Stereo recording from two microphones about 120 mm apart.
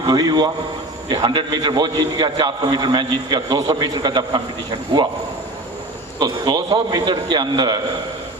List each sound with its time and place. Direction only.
0.0 s a man's voice: 35° right (ahead or behind)
6.1 s a man's voice: 35° right (ahead or behind)